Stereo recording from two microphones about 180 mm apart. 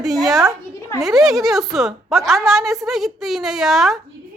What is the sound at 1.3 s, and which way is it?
Speech, centre (ahead or behind).